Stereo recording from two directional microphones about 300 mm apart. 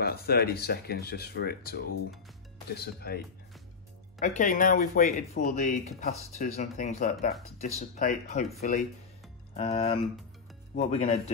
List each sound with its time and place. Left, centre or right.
0.0 s speech: left
4.2 s speech: left